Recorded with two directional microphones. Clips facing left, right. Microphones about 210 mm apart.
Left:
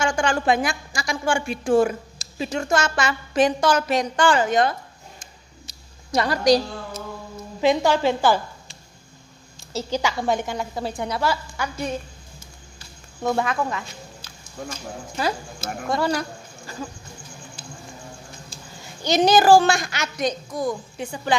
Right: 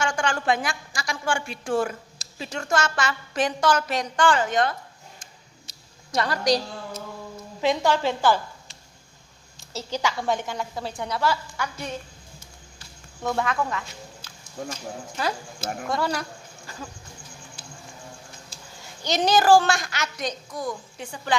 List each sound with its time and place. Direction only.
0.0 s a woman's voice: 10° left (ahead or behind)
5.2 s a sound: 10° left (ahead or behind)
7.6 s a woman's voice: 5° left (ahead or behind)
9.7 s a woman's voice: 5° left (ahead or behind)
12.7 s a sound: 10° left (ahead or behind)
13.7 s speech: 10° left (ahead or behind)
19.0 s a woman's voice: 10° left (ahead or behind)